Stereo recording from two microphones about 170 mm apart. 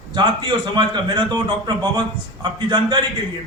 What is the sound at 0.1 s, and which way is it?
A man's voice, 25° right (ahead or behind).